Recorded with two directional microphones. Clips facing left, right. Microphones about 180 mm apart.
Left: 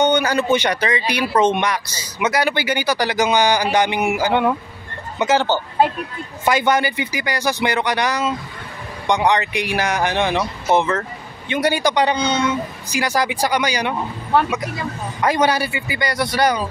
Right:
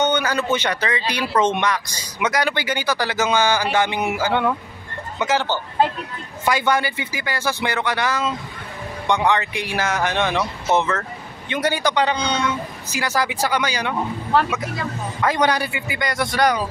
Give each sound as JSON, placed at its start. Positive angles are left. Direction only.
{"t": 0.0, "sound": "speech", "side_deg": 15}
{"t": 6.4, "sound": "speech", "side_deg": 20}
{"t": 15.1, "sound": "a man's voice", "side_deg": 10}